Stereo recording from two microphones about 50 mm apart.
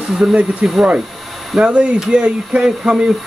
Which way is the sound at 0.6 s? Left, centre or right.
Centre.